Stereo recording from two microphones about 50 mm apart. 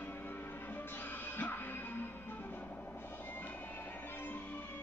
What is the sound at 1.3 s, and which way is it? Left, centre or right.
Music, left.